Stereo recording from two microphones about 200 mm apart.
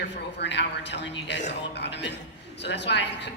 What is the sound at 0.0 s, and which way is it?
A woman's voice, 60° left (ahead or behind).